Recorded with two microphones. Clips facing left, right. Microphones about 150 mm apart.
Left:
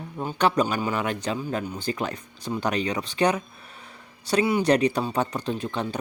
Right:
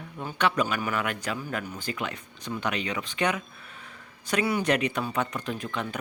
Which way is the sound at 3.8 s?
35° left (ahead or behind).